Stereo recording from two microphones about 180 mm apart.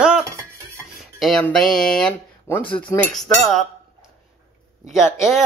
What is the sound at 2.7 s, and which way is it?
Speech, 30° left (ahead or behind).